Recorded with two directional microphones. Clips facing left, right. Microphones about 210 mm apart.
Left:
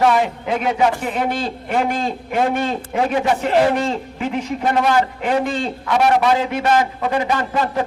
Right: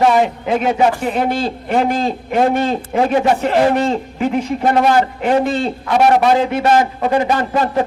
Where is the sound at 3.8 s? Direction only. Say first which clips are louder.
Right 5 dB; 40° right (ahead or behind).